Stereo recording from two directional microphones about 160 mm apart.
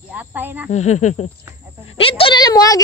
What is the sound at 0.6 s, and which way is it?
Speech, 45° left (ahead or behind).